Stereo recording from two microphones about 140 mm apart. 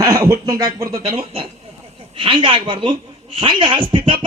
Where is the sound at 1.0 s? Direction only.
45° right (ahead or behind).